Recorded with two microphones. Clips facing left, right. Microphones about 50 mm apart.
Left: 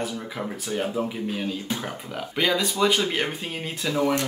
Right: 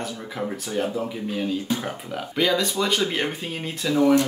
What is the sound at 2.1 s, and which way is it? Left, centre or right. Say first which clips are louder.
Speech: right 2 dB; centre.